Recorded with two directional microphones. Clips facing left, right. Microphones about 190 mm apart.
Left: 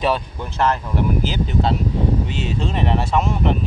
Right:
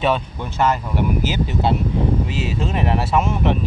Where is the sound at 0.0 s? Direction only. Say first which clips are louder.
Right 1 dB; centre (ahead or behind).